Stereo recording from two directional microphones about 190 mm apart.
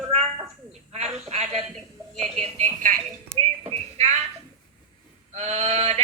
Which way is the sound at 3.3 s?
35° right (ahead or behind).